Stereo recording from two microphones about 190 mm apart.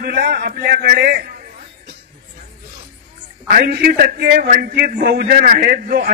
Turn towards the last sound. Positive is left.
turn(degrees=-55)  # may be behind; listen again after turning